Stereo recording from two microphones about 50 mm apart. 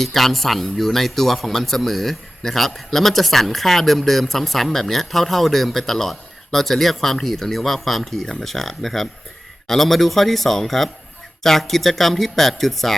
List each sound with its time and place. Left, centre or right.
0.0 s a man's voice: centre